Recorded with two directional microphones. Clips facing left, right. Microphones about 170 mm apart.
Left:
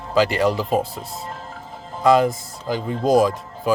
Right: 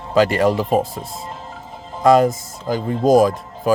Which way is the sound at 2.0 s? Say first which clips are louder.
Right 3 dB; 45° right (ahead or behind).